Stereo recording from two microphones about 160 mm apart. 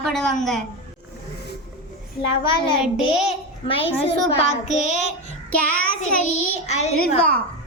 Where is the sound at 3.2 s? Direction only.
35° left (ahead or behind).